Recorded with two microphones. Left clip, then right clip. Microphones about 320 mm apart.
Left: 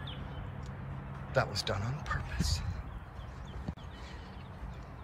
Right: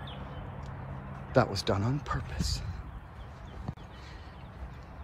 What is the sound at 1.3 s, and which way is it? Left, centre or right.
Speech, centre.